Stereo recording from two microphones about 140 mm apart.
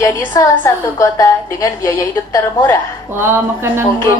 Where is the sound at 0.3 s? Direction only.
20° left (ahead or behind).